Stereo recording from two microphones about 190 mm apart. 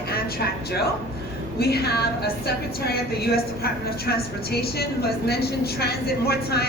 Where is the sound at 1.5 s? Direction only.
55° left (ahead or behind).